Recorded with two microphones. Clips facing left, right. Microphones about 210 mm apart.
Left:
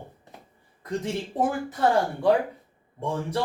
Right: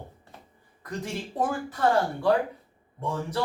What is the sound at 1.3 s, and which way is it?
Speech, 20° left (ahead or behind).